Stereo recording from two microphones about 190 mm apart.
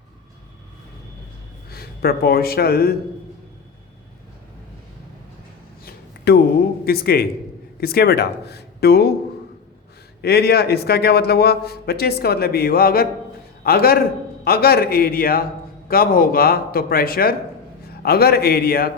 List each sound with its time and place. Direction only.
1.7 s speech: 55° left (ahead or behind)
5.8 s a sound: 55° left (ahead or behind)
6.8 s a man's voice: 55° left (ahead or behind)
10.2 s a man's voice: 55° left (ahead or behind)